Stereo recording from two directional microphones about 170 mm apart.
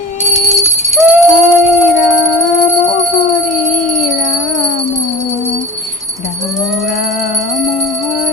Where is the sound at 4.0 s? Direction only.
40° left (ahead or behind).